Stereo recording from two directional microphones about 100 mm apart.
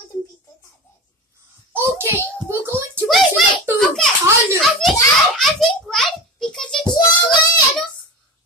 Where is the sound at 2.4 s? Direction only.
25° right (ahead or behind).